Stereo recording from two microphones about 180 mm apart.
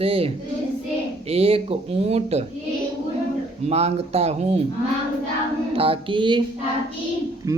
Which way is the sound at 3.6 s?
35° right (ahead or behind).